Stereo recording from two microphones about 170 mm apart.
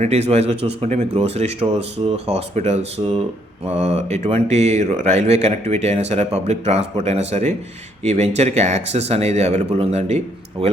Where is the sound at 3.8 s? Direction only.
40° right (ahead or behind).